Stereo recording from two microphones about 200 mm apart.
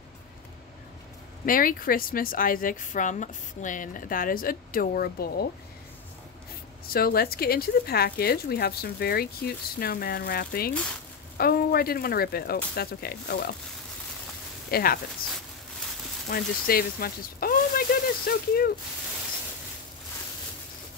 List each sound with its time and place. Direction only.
1.4 s a woman's voice: 45° left (ahead or behind)
6.9 s a woman's voice: 50° left (ahead or behind)
14.7 s speech: 50° left (ahead or behind)
16.3 s a woman's voice: 50° left (ahead or behind)